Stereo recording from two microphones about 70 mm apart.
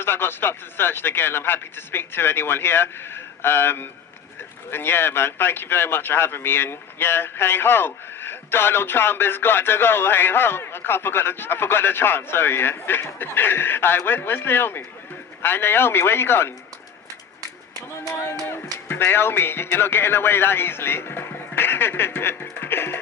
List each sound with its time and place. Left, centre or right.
0.0 s speech: left
18.4 s speech: left